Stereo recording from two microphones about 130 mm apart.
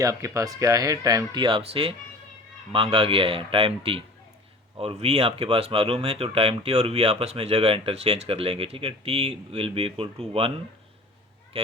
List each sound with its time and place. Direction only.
0.0 s speech: 25° right (ahead or behind); by 10.5 s 45° right (ahead or behind)
11.5 s speech: 50° right (ahead or behind)